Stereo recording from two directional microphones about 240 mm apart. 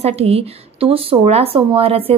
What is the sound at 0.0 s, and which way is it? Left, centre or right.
A woman's voice, right.